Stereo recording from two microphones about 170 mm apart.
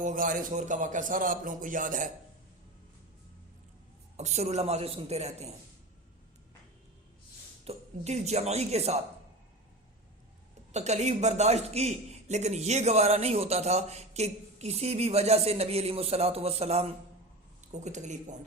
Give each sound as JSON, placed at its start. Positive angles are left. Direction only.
{"t": 0.0, "sound": "a man's voice", "side_deg": -50}
{"t": 4.2, "sound": "a man's voice", "side_deg": -40}
{"t": 7.6, "sound": "a man's voice", "side_deg": -40}
{"t": 10.7, "sound": "a man's voice", "side_deg": -40}